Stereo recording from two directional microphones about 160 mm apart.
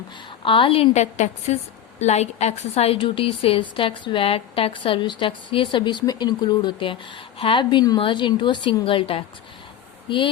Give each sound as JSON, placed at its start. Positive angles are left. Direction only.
{"t": 0.4, "sound": "a woman's voice", "side_deg": 35}